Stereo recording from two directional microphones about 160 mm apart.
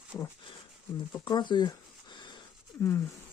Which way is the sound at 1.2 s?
30° left (ahead or behind).